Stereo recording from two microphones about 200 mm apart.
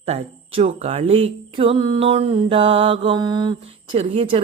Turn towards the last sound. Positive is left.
turn(degrees=-25)  # may be behind; listen again after turning